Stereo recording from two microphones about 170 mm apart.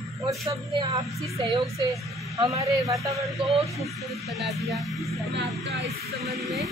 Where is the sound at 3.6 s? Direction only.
Centre (ahead or behind).